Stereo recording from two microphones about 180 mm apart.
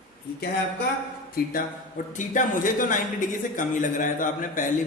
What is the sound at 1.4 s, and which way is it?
Speech, 55° left (ahead or behind).